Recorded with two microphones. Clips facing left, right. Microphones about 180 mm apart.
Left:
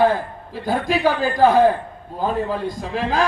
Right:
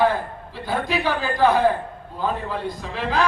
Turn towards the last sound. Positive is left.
turn(degrees=45)  # may be behind; listen again after turning